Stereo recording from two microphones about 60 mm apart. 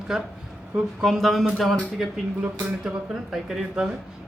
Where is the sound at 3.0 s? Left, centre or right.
Centre.